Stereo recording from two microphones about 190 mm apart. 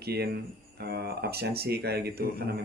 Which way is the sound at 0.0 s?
55° right (ahead or behind).